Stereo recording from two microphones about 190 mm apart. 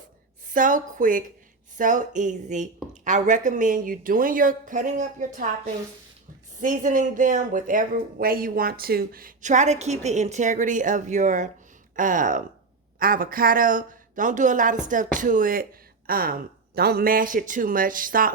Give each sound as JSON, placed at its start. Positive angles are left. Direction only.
{"t": 0.5, "sound": "speech", "side_deg": -45}
{"t": 6.6, "sound": "speech", "side_deg": -45}